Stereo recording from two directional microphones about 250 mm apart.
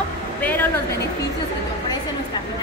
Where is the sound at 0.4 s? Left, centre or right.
Centre.